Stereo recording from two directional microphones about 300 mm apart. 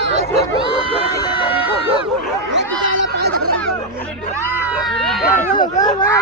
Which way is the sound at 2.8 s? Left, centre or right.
Right.